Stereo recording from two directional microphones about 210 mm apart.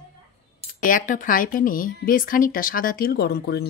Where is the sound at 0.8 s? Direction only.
40° left (ahead or behind).